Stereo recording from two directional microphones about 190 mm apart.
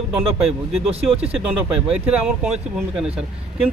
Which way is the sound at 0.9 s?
30° right (ahead or behind).